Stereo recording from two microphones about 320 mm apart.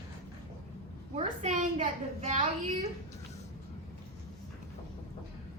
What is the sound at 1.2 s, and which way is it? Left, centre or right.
A child's voice, right.